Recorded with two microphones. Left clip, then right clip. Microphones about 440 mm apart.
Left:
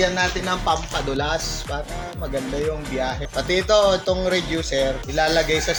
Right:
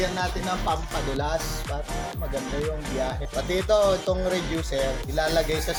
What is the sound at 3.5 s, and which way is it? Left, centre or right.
Music, right.